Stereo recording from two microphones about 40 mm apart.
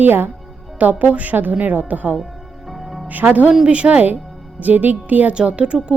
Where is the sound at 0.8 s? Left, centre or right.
Right.